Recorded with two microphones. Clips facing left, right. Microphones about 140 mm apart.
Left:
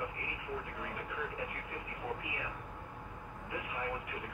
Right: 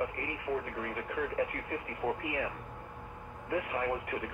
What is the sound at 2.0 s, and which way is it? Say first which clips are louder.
Speech: right 7 dB; 50° right (ahead or behind).